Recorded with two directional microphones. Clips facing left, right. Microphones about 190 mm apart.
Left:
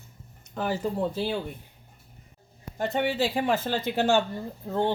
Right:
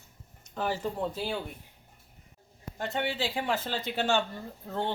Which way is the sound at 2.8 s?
40° left (ahead or behind).